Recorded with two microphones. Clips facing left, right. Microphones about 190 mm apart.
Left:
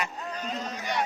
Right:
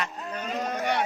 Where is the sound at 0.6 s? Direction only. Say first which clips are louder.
Right 5 dB; 60° right (ahead or behind).